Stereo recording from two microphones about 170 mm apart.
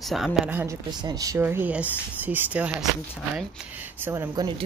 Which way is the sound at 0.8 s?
25° right (ahead or behind).